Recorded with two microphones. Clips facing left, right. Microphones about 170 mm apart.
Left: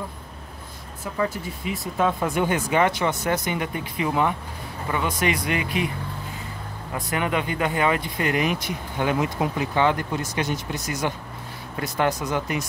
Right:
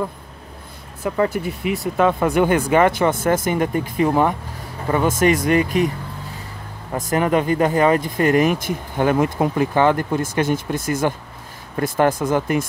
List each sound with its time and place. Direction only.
1.0 s speech: 65° right (ahead or behind); by 5.9 s 45° right (ahead or behind)
6.9 s speech: 40° right (ahead or behind)